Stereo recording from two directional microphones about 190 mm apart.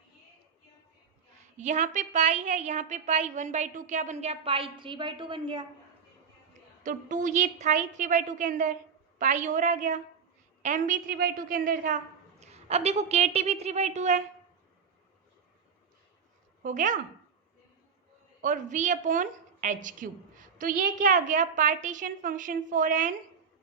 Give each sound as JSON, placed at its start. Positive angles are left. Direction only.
{"t": 1.5, "sound": "a woman's voice", "side_deg": -40}
{"t": 6.8, "sound": "a woman's voice", "side_deg": -40}
{"t": 12.4, "sound": "a woman's voice", "side_deg": -35}
{"t": 16.6, "sound": "a woman's voice", "side_deg": -45}
{"t": 18.4, "sound": "a woman's voice", "side_deg": -40}